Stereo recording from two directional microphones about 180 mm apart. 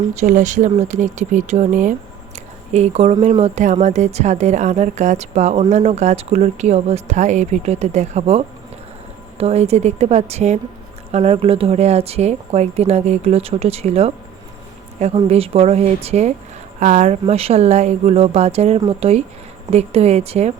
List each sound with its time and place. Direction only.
0.1 s speech: 40° right (ahead or behind)